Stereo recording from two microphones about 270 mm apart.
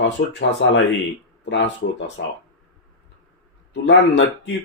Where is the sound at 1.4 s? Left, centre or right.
Left.